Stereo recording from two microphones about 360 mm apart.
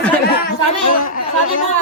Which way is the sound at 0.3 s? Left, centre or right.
Left.